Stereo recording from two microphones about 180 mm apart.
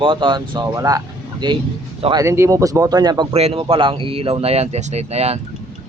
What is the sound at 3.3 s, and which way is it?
Speech, 30° right (ahead or behind).